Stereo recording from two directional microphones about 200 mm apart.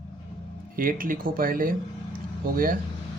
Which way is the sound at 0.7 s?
45° right (ahead or behind).